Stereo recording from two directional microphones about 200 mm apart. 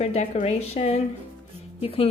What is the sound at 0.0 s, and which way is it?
A woman's voice, 35° left (ahead or behind).